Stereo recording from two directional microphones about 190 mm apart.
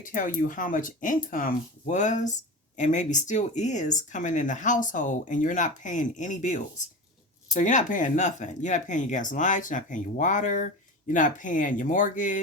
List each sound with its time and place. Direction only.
0.0 s speech: 45° left (ahead or behind)